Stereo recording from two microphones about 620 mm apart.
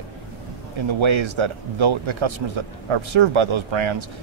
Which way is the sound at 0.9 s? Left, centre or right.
Right.